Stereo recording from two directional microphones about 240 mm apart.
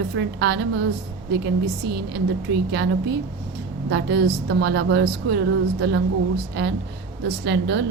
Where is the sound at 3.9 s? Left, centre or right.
Right.